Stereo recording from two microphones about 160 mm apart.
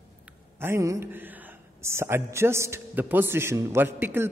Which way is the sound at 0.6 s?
15° right (ahead or behind).